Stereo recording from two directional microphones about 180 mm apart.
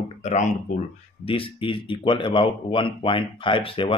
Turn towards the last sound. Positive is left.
turn(degrees=30)  # may be behind; listen again after turning